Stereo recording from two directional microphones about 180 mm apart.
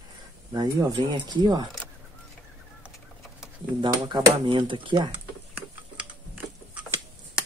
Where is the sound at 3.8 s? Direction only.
25° right (ahead or behind).